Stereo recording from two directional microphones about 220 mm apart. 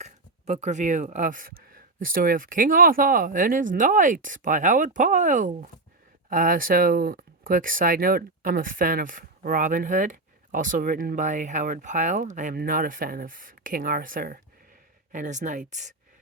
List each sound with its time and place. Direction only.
0.0 s speech: 30° right (ahead or behind)